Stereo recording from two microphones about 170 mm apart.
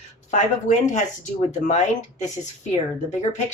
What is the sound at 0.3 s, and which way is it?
Speech, 45° left (ahead or behind).